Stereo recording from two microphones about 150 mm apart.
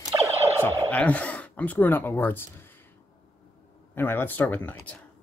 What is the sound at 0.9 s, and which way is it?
Speech, 10° left (ahead or behind).